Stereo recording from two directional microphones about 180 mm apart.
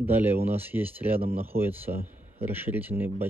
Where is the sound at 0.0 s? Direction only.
10° right (ahead or behind).